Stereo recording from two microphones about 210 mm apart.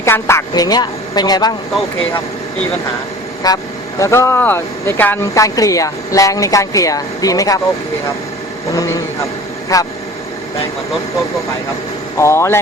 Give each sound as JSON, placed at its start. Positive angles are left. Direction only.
{"t": 0.0, "sound": "speech", "side_deg": 10}
{"t": 3.4, "sound": "speech", "side_deg": 15}
{"t": 8.7, "sound": "speech", "side_deg": 15}
{"t": 12.1, "sound": "speech", "side_deg": 15}